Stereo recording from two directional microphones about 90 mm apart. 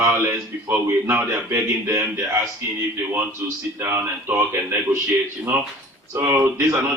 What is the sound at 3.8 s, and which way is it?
A man's voice, 25° right (ahead or behind).